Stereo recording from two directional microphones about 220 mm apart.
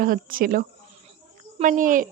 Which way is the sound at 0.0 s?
40° right (ahead or behind).